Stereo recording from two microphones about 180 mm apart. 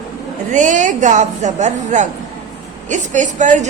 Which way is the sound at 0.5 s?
45° right (ahead or behind).